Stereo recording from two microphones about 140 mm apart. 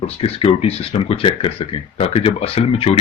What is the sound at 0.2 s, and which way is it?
Speech, 45° left (ahead or behind).